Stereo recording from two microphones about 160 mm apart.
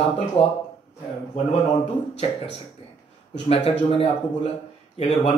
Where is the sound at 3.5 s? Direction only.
40° left (ahead or behind).